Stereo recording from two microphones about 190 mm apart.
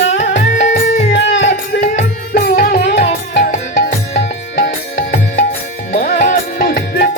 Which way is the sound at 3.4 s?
45° left (ahead or behind).